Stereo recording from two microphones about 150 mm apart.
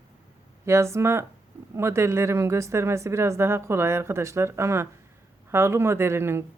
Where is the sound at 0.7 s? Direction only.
20° right (ahead or behind).